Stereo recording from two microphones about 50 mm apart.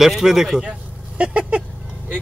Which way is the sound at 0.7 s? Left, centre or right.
Right.